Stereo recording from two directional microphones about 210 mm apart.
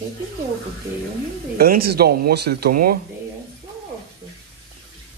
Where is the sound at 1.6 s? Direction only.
45° right (ahead or behind).